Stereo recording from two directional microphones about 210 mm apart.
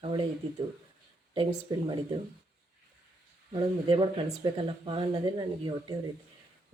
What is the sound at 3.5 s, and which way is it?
Speech, 25° right (ahead or behind).